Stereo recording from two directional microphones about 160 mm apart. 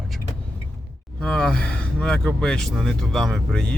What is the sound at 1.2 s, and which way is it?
Speech, 5° left (ahead or behind).